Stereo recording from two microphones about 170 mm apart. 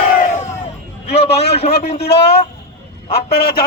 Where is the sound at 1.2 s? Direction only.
80° left.